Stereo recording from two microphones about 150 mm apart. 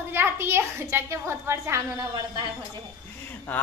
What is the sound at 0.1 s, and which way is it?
A woman's voice, 15° right (ahead or behind).